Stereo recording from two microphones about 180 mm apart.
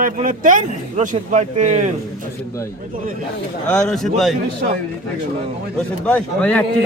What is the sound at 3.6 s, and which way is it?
Speech, 5° left (ahead or behind).